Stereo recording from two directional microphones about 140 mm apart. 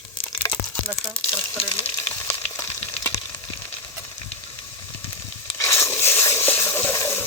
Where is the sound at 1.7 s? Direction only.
25° left (ahead or behind).